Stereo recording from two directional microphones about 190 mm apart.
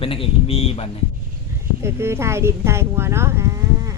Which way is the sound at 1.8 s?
15° right (ahead or behind).